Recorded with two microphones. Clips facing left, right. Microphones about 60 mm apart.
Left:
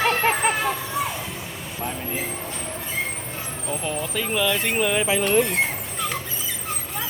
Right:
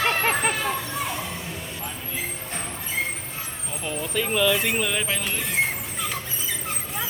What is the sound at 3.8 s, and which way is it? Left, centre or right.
Speech, centre.